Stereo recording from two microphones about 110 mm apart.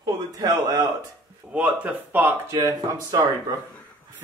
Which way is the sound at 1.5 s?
15° right (ahead or behind).